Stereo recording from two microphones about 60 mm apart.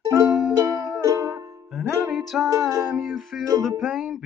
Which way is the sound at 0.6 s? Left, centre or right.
Right.